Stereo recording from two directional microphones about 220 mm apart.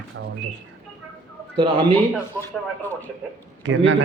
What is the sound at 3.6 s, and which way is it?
Speech, 55° right (ahead or behind).